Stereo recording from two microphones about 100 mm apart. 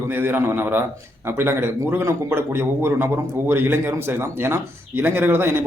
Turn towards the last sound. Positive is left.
turn(degrees=-20)  # may be behind; listen again after turning